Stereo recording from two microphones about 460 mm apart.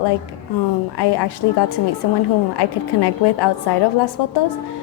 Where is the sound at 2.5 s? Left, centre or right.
Left.